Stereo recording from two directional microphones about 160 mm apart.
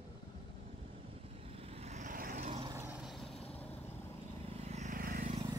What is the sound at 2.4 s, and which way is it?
Vehicle, 45° right (ahead or behind).